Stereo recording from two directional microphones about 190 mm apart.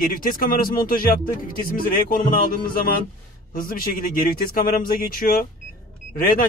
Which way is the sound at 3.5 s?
45° left (ahead or behind).